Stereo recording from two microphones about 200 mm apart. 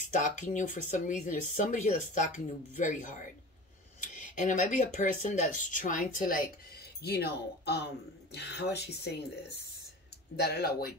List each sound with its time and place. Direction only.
0.0 s speech: 40° left (ahead or behind)